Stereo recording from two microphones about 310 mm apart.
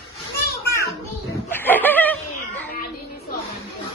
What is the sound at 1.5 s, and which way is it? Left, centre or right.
Snicker, centre.